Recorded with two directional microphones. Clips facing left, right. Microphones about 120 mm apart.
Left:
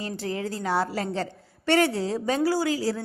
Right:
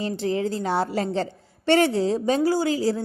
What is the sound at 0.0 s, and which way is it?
A woman's voice, 25° right (ahead or behind).